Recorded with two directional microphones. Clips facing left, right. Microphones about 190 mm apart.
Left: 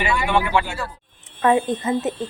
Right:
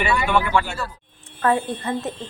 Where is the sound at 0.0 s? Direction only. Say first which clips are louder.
Even; 20° left (ahead or behind).